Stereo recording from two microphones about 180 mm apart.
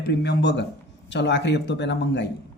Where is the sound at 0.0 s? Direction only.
70° left (ahead or behind).